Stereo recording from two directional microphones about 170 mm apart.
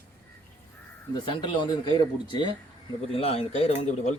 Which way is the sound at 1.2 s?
30° left (ahead or behind).